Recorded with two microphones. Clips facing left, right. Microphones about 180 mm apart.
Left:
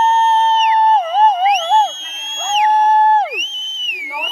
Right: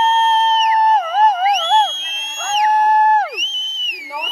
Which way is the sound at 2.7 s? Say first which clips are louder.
Left 1 dB; 25° left (ahead or behind).